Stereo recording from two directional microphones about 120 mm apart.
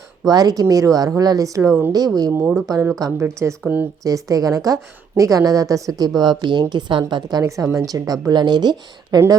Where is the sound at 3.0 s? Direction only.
25° right (ahead or behind).